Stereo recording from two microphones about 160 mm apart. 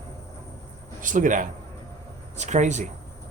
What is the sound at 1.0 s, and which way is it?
Speech, 55° right (ahead or behind).